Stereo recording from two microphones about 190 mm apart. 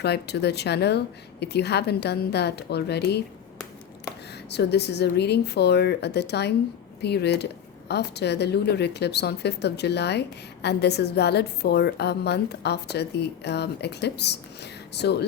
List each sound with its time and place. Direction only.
0.0 s speech: 60° left (ahead or behind)
4.4 s speech: 60° left (ahead or behind)